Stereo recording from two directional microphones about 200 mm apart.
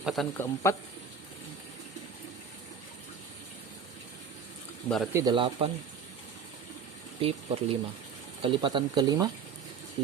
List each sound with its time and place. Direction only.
0.0 s speech: centre (ahead or behind)
0.3 s speech: 15° left (ahead or behind)
5.1 s speech: 20° right (ahead or behind)
7.2 s speech: 30° right (ahead or behind)